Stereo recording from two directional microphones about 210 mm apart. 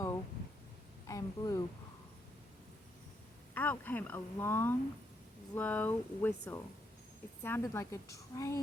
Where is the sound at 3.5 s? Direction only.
10° left (ahead or behind).